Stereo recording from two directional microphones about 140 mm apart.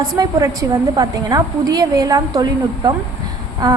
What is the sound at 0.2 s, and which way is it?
A woman's voice, 25° right (ahead or behind).